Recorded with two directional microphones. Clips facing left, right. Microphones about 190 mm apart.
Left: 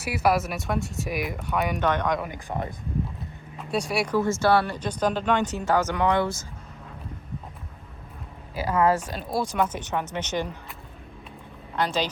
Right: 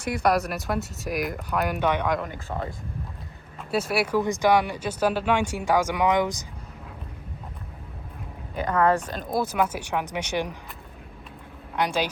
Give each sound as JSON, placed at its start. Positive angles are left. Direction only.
{"t": 0.0, "sound": "speech", "side_deg": 5}
{"t": 2.2, "sound": "speech", "side_deg": 15}
{"t": 3.6, "sound": "speech", "side_deg": 0}
{"t": 4.2, "sound": "speech", "side_deg": -15}
{"t": 8.5, "sound": "speech", "side_deg": 10}
{"t": 9.3, "sound": "speech", "side_deg": -5}
{"t": 11.8, "sound": "speech", "side_deg": -10}